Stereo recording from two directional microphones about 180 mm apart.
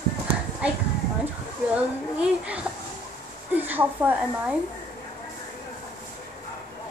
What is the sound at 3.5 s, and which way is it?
A woman's voice, 10° right (ahead or behind).